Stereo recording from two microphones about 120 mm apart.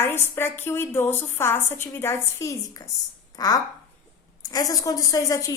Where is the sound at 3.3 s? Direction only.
30° left (ahead or behind).